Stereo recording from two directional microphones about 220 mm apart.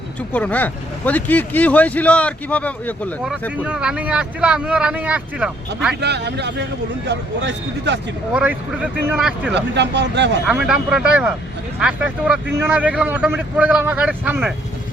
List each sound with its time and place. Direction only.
0.3 s speech: 5° left (ahead or behind)
3.6 s speech: 5° right (ahead or behind)
6.0 s speech: 50° right (ahead or behind)
8.3 s speech: 5° right (ahead or behind)
9.6 s speech: 50° right (ahead or behind)
10.4 s speech: 5° right (ahead or behind)